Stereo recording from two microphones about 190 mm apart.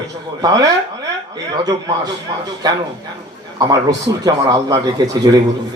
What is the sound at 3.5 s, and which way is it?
A man's voice, 20° right (ahead or behind).